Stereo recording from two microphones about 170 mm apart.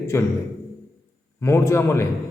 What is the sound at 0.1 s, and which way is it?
Speech, 15° left (ahead or behind).